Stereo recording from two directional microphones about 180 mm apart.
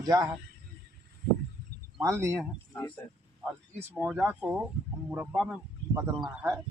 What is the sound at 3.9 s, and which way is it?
Speech, 5° right (ahead or behind).